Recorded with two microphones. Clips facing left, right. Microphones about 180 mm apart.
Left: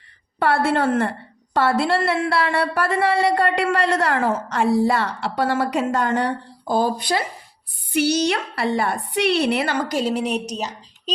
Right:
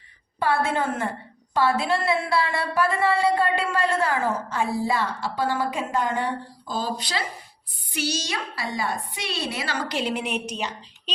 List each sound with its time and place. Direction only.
0.3 s a woman's voice: 70° left (ahead or behind); by 11.1 s 40° left (ahead or behind)